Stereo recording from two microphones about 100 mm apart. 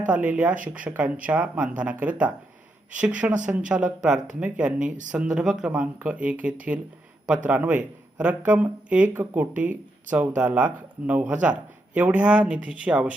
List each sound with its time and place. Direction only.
0.1 s speech: 15° right (ahead or behind)